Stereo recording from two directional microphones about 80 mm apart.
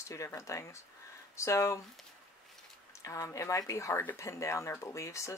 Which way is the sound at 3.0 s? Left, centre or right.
Left.